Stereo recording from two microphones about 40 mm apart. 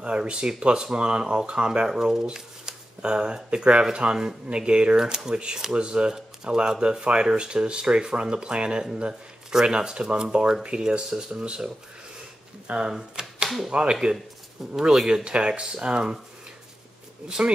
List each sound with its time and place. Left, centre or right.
0.0 s speech: right
1.9 s speech: centre
12.6 s speech: right
12.9 s typewriter: centre
13.7 s speech: right
14.8 s speech: centre
15.0 s speech: right
17.4 s speech: right